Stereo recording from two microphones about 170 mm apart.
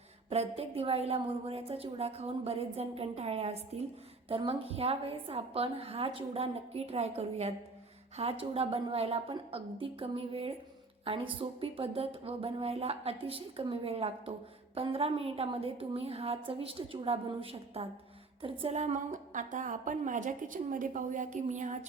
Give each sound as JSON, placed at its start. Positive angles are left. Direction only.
{"t": 0.3, "sound": "a woman's voice", "side_deg": -35}